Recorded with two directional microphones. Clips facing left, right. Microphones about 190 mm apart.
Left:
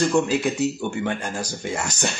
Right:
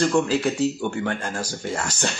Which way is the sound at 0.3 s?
15° left (ahead or behind).